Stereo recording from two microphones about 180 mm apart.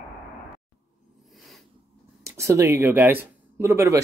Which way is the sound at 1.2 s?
Centre (ahead or behind).